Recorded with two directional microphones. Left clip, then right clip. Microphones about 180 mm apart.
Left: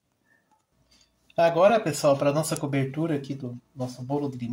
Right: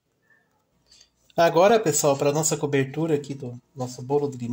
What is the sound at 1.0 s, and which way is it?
Speech, 45° right (ahead or behind).